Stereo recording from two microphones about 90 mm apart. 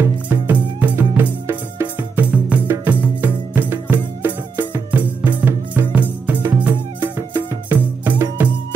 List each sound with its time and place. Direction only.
0.0 s music: 20° right (ahead or behind)